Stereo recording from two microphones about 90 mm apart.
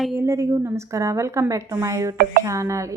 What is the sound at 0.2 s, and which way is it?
A woman's voice, 35° right (ahead or behind).